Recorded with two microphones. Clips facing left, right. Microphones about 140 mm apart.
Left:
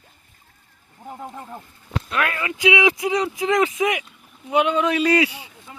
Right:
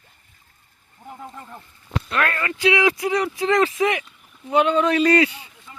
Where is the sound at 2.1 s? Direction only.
5° left (ahead or behind).